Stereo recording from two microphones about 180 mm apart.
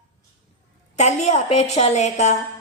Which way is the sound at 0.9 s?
40° left (ahead or behind).